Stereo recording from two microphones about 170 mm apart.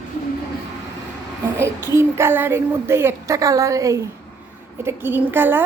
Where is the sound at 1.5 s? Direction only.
15° right (ahead or behind).